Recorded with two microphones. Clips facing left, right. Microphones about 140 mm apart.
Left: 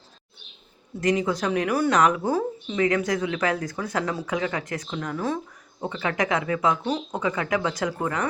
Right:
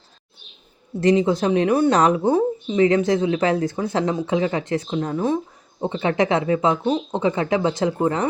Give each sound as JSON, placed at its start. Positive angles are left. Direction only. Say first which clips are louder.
{"t": 1.0, "sound": "speech", "louder": "right 6 dB", "side_deg": -25}